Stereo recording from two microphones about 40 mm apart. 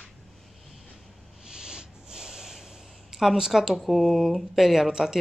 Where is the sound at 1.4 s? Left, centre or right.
Centre.